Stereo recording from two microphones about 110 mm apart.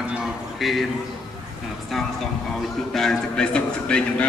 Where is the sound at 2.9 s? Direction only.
5° left (ahead or behind).